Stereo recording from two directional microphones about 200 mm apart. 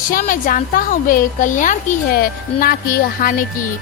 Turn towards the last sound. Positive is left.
turn(degrees=45)  # may be behind; listen again after turning